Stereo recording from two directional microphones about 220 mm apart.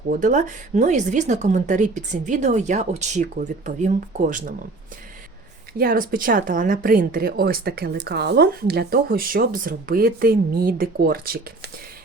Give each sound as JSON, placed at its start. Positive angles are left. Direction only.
{"t": 0.1, "sound": "speech", "side_deg": -35}
{"t": 5.7, "sound": "speech", "side_deg": -40}